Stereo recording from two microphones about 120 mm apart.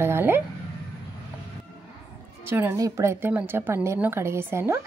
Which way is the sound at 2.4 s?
20° right (ahead or behind).